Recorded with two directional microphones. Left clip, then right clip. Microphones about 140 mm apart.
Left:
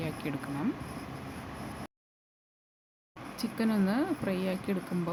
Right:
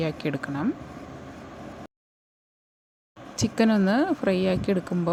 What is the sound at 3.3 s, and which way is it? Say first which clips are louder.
Speech: right 9 dB; 65° right (ahead or behind).